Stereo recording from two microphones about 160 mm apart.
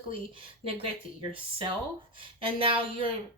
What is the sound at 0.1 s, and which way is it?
Speech, 35° right (ahead or behind).